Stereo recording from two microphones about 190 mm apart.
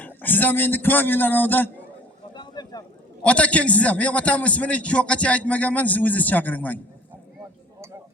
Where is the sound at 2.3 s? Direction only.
20° left (ahead or behind).